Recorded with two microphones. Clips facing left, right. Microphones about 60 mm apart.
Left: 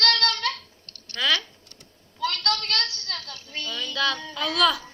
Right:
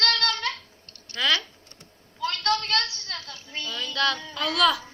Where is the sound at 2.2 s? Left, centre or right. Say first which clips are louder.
Right 1 dB; right.